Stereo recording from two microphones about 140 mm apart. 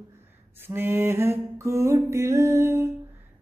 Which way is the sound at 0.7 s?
15° right (ahead or behind).